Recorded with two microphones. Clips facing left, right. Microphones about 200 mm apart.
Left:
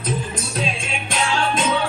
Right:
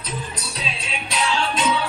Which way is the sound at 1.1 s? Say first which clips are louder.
Left 2 dB; 50° left (ahead or behind).